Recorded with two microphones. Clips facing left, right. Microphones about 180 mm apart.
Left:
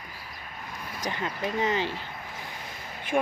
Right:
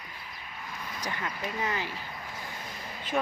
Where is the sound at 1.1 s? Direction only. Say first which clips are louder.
Left 6 dB; 25° left (ahead or behind).